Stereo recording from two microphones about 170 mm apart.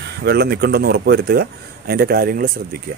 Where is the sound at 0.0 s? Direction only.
70° right (ahead or behind).